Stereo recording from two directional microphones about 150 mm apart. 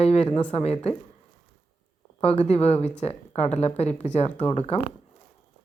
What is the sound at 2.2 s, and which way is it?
A woman's voice, 45° left (ahead or behind).